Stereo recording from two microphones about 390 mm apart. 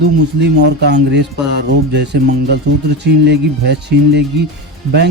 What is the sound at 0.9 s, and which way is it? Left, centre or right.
Speech, right.